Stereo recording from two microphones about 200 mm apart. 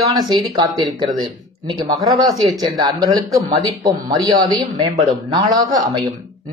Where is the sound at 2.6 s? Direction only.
20° right (ahead or behind).